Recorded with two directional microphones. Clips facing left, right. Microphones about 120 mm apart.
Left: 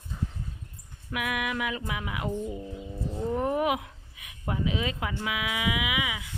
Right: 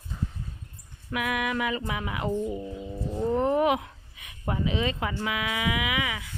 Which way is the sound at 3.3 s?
5° left (ahead or behind).